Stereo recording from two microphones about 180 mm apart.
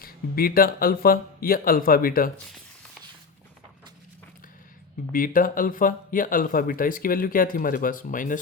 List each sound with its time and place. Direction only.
0.0 s speech: 55° left (ahead or behind)
5.1 s speech: 50° left (ahead or behind)